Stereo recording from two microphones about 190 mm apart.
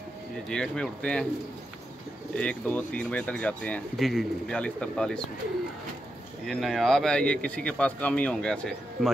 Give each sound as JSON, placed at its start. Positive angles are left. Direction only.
{"t": 0.5, "sound": "speech", "side_deg": 5}
{"t": 2.3, "sound": "speech", "side_deg": 5}
{"t": 6.4, "sound": "speech", "side_deg": 0}